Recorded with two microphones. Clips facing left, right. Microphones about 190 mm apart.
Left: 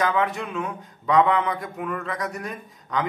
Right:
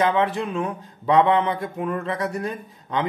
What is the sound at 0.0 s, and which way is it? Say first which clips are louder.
Speech: right 3 dB; 30° right (ahead or behind).